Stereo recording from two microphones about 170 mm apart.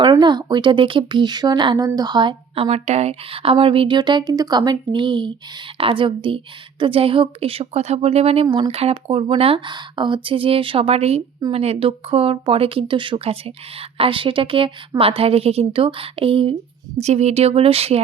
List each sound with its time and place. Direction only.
0.0 s a woman's voice: 25° right (ahead or behind)